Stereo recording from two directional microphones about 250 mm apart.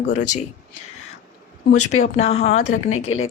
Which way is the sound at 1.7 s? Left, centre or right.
Left.